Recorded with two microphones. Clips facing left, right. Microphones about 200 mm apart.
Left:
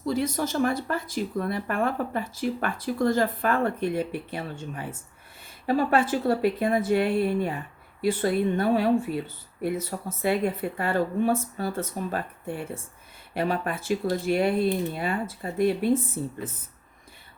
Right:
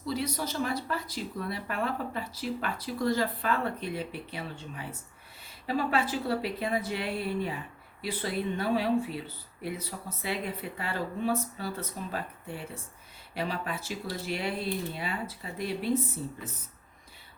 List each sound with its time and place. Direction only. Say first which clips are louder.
0.0 s speech: left 6 dB; 50° left (ahead or behind)